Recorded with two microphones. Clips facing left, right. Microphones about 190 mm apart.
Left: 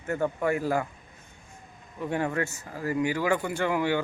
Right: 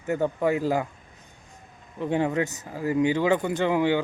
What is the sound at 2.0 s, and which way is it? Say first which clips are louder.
Speech: right 4 dB; 20° right (ahead or behind).